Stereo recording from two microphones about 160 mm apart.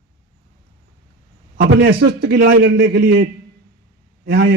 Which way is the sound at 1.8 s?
85° right.